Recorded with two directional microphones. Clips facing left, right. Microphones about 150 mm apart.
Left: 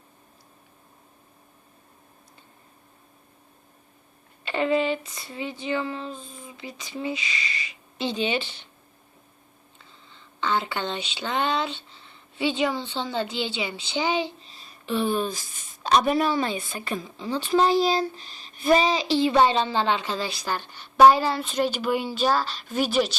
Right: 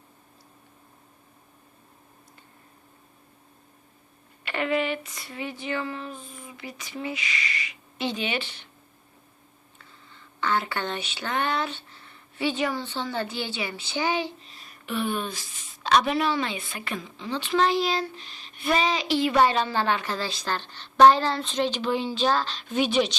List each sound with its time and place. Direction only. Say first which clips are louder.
4.5 s a woman's voice: left 3 dB; 30° left (ahead or behind)
10.4 s a woman's voice: left 1 dB; 20° left (ahead or behind); by 23.1 s 5° left (ahead or behind)